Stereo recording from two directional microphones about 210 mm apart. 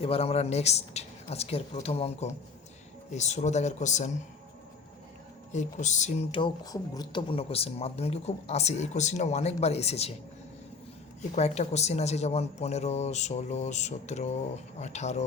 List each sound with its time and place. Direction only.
0.0 s speech: 30° left (ahead or behind)
5.5 s speech: 35° left (ahead or behind)
11.2 s speech: 30° left (ahead or behind)